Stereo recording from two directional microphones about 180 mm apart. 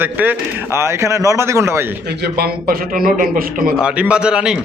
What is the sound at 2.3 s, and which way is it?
A man's voice, 55° right (ahead or behind).